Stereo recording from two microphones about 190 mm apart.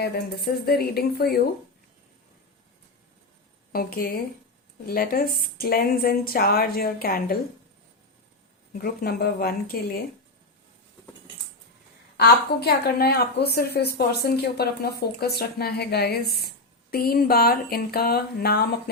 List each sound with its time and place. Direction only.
0.0 s a woman's voice: 55° left (ahead or behind)
3.7 s a woman's voice: 50° left (ahead or behind)
8.8 s a woman's voice: 55° left (ahead or behind)
12.1 s a woman's voice: 55° left (ahead or behind)